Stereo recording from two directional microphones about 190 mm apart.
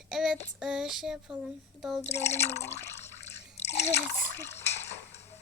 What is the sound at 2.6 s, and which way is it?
Water, 60° left (ahead or behind).